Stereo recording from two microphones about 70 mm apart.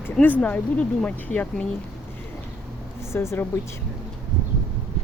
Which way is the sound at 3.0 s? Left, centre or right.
Left.